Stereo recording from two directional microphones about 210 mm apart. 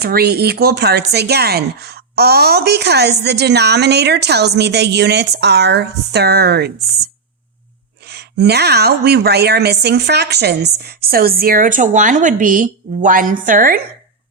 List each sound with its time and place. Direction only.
0.0 s speech: 50° right (ahead or behind)
8.0 s a woman's voice: 50° right (ahead or behind)